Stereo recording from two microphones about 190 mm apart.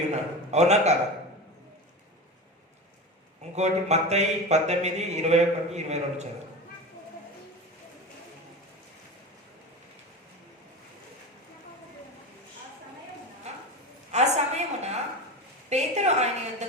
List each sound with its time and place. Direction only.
0.1 s speech: 35° right (ahead or behind)
3.5 s speech: 35° right (ahead or behind)
14.1 s a sound: 35° right (ahead or behind)